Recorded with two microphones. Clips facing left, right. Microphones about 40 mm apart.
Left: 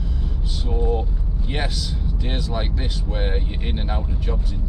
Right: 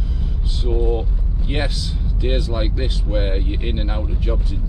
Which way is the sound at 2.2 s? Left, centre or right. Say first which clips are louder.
Right 5 dB; centre.